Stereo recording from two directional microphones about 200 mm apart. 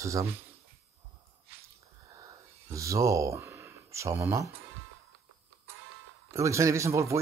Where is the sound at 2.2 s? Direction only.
15° right (ahead or behind).